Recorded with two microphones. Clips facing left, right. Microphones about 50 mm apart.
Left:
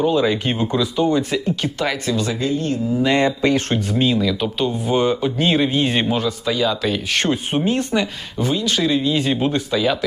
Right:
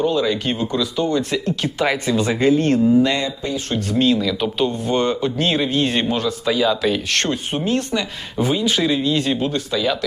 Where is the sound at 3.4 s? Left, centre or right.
Left.